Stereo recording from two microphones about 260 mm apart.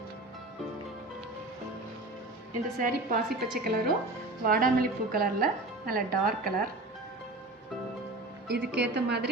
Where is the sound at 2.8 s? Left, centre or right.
Right.